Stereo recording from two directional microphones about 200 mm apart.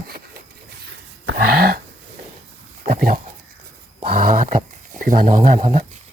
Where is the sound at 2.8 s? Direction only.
45° right (ahead or behind).